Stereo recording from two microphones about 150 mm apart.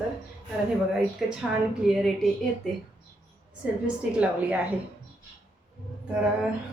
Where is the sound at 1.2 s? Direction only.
Centre (ahead or behind).